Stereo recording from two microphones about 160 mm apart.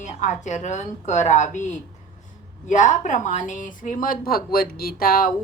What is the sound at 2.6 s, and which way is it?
Speech, 50° left (ahead or behind).